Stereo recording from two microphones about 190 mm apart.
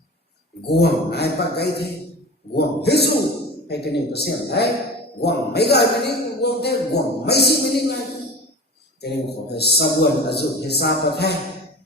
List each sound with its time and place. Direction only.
0.7 s a man's voice: 60° left (ahead or behind)
9.5 s a man's voice: 60° left (ahead or behind)